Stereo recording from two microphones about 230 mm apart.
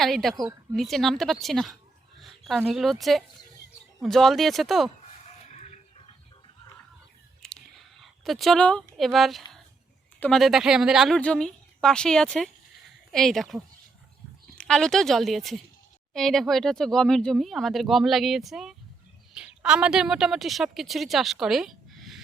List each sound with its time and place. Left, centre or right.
0.0 s speech: centre
5.5 s chicken: left
7.4 s chewing: centre
8.0 s speech: centre
14.6 s a woman's voice: centre